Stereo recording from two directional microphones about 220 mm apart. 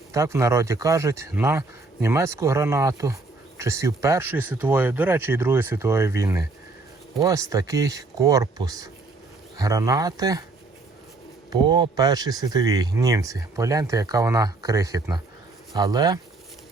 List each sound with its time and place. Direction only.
0.1 s speech: 15° right (ahead or behind)
11.5 s speech: 20° right (ahead or behind)